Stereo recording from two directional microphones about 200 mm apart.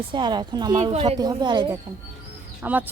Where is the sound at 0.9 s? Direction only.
30° right (ahead or behind).